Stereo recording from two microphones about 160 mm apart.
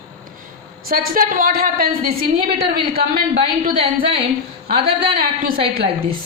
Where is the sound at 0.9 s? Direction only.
60° right (ahead or behind).